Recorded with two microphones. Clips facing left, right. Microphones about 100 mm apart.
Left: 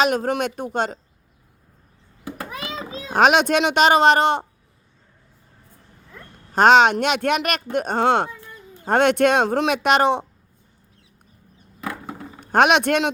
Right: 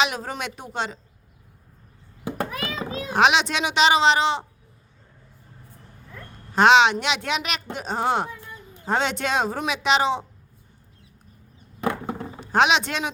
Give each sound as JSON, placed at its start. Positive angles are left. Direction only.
{"t": 0.0, "sound": "speech", "side_deg": 50}
{"t": 2.5, "sound": "a sound", "side_deg": 20}
{"t": 3.1, "sound": "speech", "side_deg": 45}
{"t": 6.5, "sound": "a woman's voice", "side_deg": 45}
{"t": 8.9, "sound": "speech", "side_deg": 55}
{"t": 11.8, "sound": "a sound", "side_deg": -25}
{"t": 12.4, "sound": "speech", "side_deg": 55}